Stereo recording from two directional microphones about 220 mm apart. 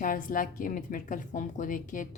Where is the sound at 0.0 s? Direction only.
40° left (ahead or behind).